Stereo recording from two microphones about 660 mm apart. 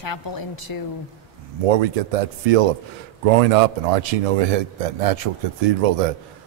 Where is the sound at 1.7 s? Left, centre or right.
Right.